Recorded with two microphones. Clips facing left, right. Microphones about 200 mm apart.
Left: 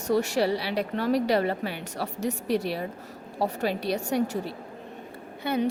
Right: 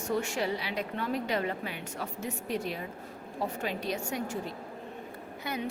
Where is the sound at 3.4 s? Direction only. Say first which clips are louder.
Left 7 dB; 35° left (ahead or behind).